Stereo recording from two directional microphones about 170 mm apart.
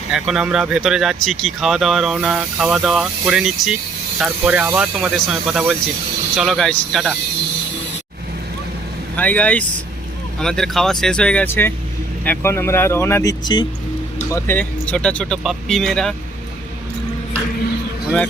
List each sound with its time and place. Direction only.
0.1 s speech: 5° right (ahead or behind)
9.1 s speech: 10° left (ahead or behind); by 13.7 s 25° left (ahead or behind)
14.3 s speech: 15° left (ahead or behind)